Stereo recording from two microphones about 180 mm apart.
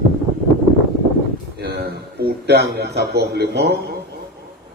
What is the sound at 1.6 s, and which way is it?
A man's voice, 65° right (ahead or behind).